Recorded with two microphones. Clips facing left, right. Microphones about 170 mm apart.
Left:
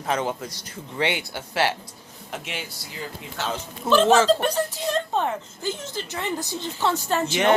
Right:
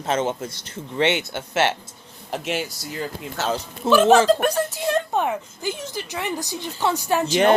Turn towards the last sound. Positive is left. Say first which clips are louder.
# right 2 dB
turn(degrees=-15)  # may be behind; listen again after turning